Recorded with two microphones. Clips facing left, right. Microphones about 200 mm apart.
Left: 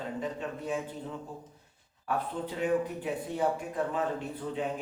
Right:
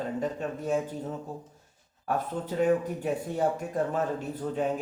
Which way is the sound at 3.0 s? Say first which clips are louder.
Right 3 dB; 45° right (ahead or behind).